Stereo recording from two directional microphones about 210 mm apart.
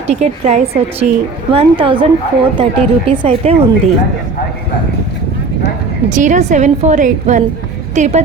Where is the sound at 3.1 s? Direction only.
25° right (ahead or behind).